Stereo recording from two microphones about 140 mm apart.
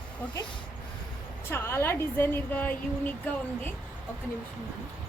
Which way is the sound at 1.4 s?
15° left (ahead or behind).